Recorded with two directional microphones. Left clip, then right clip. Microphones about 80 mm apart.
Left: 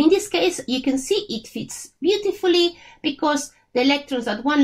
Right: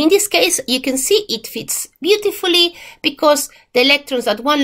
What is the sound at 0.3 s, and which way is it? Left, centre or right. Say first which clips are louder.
A woman's voice: right 6 dB; right.